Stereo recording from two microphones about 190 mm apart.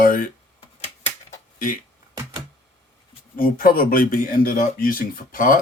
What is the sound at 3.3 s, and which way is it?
Speech, 45° left (ahead or behind).